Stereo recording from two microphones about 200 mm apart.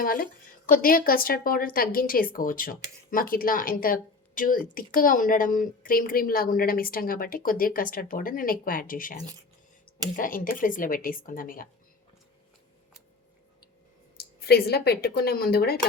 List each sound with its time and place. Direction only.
0.0 s speech: 45° left (ahead or behind)
10.2 s speech: 45° left (ahead or behind)
14.2 s speech: 50° left (ahead or behind)